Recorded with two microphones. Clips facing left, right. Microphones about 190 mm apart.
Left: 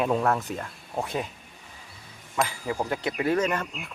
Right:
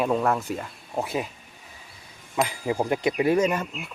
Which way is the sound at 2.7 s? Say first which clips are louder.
Right 4 dB; 25° right (ahead or behind).